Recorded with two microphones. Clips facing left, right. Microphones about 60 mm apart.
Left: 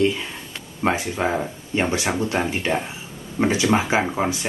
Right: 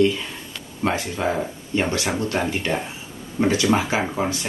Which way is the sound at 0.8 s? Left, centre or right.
Centre.